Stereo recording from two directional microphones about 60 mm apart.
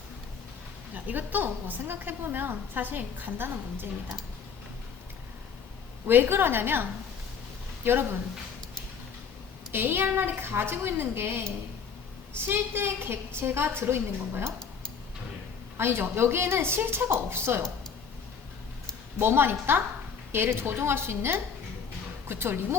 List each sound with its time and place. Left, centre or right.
0.9 s a woman's voice: right
6.1 s a woman's voice: right
7.9 s a woman's voice: right
9.7 s a woman's voice: right
15.8 s a woman's voice: right
19.2 s a woman's voice: right